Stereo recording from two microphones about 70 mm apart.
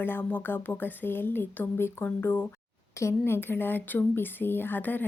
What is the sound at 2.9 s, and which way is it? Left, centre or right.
A woman's voice, left.